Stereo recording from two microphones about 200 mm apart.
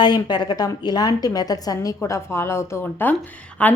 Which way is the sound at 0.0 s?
20° left (ahead or behind).